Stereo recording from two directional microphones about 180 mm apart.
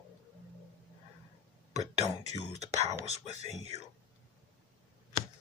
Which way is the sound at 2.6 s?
35° right (ahead or behind).